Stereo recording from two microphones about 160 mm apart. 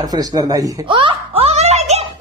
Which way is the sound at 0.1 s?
25° right (ahead or behind).